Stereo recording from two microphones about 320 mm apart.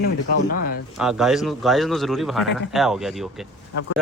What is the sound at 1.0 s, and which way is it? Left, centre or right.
A man's voice, centre.